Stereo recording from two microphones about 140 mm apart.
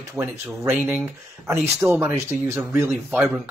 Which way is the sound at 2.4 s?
20° right (ahead or behind).